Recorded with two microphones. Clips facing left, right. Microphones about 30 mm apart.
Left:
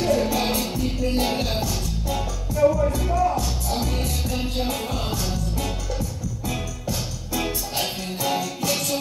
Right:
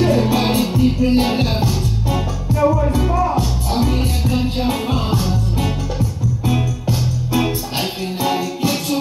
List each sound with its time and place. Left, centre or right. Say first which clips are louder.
0.0 s music: right 6 dB; right
6.4 s music: right 8 dB; right